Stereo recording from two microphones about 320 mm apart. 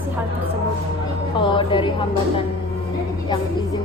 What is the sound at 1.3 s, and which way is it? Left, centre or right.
Speech, centre.